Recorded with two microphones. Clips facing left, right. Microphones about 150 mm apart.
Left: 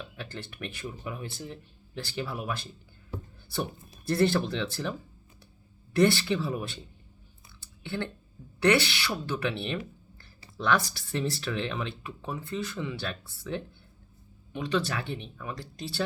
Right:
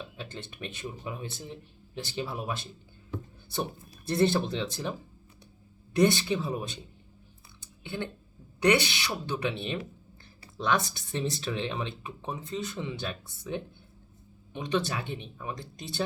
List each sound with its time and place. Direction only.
0.0 s speech: 20° right (ahead or behind)
4.1 s speech: 20° right (ahead or behind)
7.6 s a sound: 15° right (ahead or behind)
8.6 s speech: 15° right (ahead or behind)